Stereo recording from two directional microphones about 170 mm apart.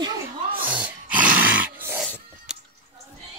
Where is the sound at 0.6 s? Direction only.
10° right (ahead or behind).